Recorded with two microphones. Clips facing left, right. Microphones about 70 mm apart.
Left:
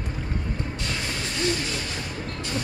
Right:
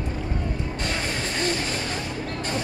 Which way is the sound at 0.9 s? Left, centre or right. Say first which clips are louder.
Right 4 dB; right.